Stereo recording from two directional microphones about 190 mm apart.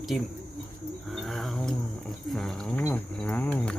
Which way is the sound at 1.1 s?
Centre (ahead or behind).